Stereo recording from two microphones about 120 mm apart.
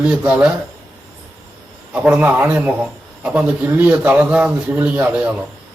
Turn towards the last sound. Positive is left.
turn(degrees=-10)  # may be behind; listen again after turning